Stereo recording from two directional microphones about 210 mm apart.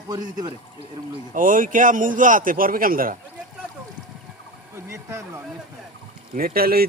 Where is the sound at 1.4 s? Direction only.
40° right (ahead or behind).